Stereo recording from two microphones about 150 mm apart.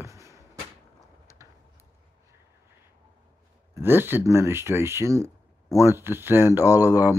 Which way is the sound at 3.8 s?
15° right (ahead or behind).